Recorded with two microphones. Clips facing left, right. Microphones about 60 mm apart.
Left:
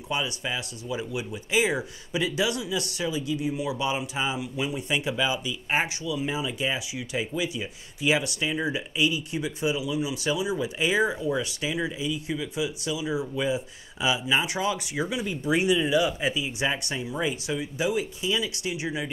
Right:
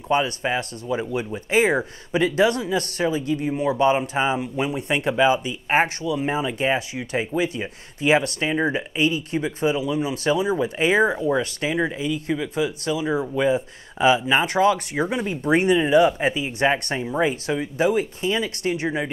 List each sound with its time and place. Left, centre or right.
0.1 s speech: right